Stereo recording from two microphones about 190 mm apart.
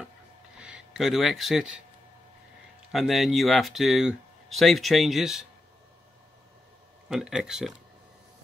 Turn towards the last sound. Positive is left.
turn(degrees=-5)  # may be behind; listen again after turning